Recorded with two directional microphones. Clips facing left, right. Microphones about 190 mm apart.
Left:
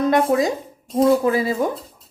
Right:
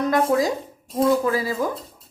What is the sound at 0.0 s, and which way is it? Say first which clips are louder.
A woman's voice: left 2 dB; 25° left (ahead or behind).